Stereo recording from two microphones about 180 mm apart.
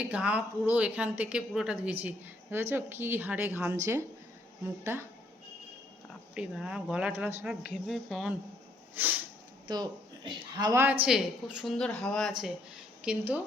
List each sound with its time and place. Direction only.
0.0 s speech: 5° right (ahead or behind)
6.3 s speech: 5° right (ahead or behind)
10.2 s speech: 20° right (ahead or behind)
11.0 s speech: 5° right (ahead or behind)